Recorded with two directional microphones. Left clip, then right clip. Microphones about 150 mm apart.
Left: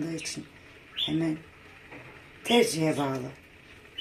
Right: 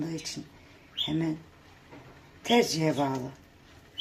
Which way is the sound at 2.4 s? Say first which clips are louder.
Left 1 dB; 25° right (ahead or behind).